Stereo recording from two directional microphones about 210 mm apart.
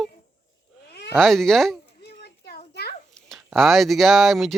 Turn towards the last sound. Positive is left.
turn(degrees=0)  # may be behind; listen again after turning